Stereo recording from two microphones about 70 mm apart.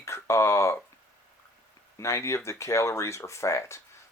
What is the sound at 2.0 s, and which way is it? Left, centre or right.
Speech, left.